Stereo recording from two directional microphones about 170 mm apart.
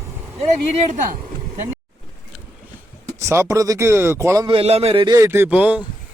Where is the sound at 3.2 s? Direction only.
15° right (ahead or behind).